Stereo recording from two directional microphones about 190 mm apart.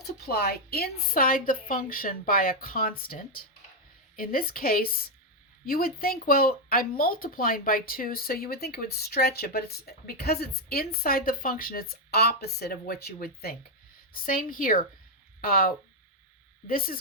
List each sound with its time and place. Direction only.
0.0 s speech: 55° left (ahead or behind)